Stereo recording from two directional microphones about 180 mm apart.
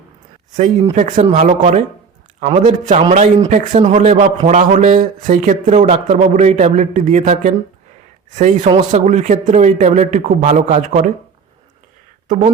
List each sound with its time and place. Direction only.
0.5 s a man's voice: 40° right (ahead or behind)